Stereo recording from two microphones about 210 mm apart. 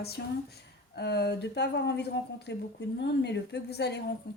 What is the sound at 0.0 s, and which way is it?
A woman's voice, 50° left (ahead or behind).